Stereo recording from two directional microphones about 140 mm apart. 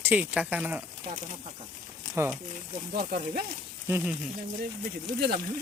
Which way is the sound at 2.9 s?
90° right.